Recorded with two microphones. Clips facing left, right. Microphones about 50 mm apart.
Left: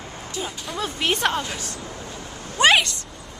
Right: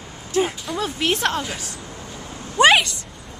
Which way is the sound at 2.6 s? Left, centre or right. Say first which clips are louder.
Right 3 dB; centre.